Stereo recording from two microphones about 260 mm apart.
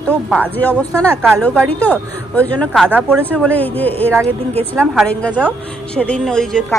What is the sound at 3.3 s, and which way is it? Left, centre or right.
Speech, centre.